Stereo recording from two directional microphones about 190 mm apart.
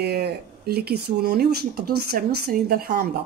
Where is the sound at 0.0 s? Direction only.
55° right (ahead or behind).